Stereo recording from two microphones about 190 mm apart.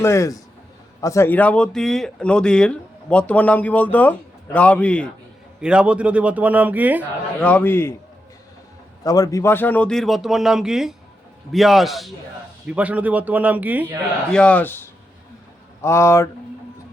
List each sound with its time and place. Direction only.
0.0 s speech: 15° left (ahead or behind)
5.5 s a man's voice: 5° right (ahead or behind)
7.4 s speech: 10° left (ahead or behind)
9.0 s a man's voice: 20° left (ahead or behind); by 13.9 s 10° right (ahead or behind)
14.3 s speech: 5° left (ahead or behind)